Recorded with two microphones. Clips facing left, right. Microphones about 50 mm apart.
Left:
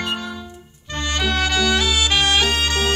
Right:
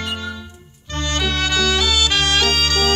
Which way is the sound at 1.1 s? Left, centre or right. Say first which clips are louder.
Even; left.